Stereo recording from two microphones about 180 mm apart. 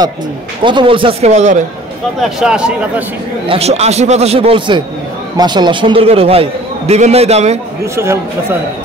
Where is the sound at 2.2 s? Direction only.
5° right (ahead or behind).